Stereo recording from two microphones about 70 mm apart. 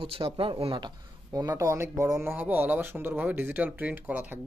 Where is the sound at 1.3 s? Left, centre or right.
Right.